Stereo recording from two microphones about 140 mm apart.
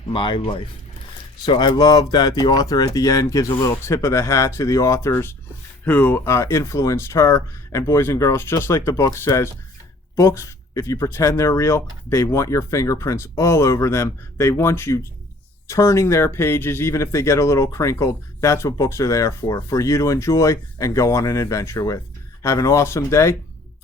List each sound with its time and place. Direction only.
0.1 s speech: 35° left (ahead or behind); by 23.3 s 20° left (ahead or behind)